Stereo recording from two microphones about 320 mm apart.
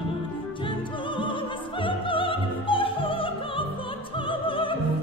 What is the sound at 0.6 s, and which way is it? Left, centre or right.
Music, centre.